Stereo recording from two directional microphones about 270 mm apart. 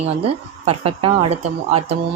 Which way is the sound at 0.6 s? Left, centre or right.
Right.